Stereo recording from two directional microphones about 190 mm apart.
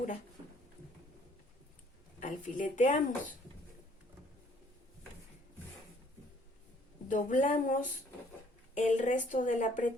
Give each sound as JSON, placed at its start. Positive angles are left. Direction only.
{"t": 2.2, "sound": "speech", "side_deg": 45}
{"t": 7.1, "sound": "a woman's voice", "side_deg": 40}